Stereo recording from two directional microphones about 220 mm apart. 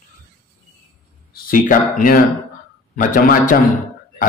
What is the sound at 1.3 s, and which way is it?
A man's voice, 40° left (ahead or behind).